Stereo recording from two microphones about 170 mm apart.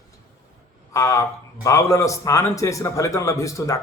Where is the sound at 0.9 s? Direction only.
15° left (ahead or behind).